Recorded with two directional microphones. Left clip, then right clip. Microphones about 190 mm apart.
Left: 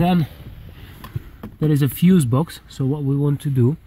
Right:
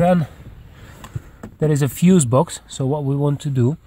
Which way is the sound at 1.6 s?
50° right (ahead or behind).